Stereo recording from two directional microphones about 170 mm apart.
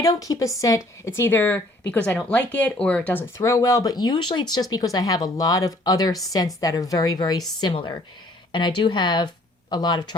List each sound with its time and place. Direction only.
0.0 s speech: 20° left (ahead or behind)